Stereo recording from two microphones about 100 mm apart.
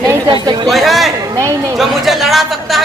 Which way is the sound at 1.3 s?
30° right (ahead or behind).